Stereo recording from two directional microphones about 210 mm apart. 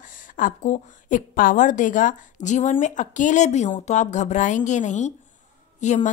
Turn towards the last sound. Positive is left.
turn(degrees=35)  # may be behind; listen again after turning